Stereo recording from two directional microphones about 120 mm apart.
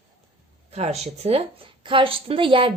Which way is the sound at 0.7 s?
60° right (ahead or behind).